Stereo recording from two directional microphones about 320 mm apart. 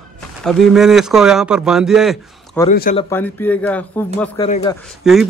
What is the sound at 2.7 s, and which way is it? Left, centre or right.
Speech, left.